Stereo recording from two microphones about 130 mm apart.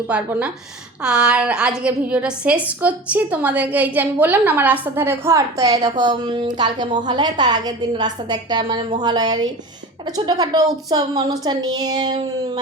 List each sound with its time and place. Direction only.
0.1 s a woman's voice: 10° right (ahead or behind); by 12.5 s 35° right (ahead or behind)